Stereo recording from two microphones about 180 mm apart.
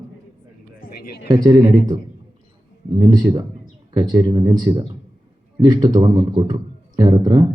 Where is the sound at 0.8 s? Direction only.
55° left (ahead or behind).